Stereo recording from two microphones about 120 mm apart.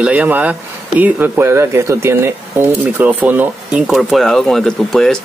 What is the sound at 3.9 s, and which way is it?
Speech, centre (ahead or behind).